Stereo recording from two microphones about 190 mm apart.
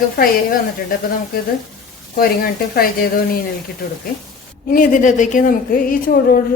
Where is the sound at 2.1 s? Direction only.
50° left (ahead or behind).